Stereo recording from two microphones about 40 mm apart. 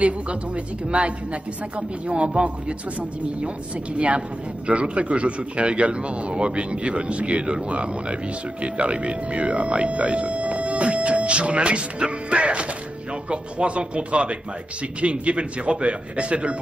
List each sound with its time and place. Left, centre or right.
0.8 s a man's voice: right